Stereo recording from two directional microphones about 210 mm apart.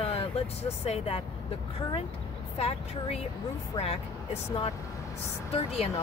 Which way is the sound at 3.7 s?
30° left (ahead or behind).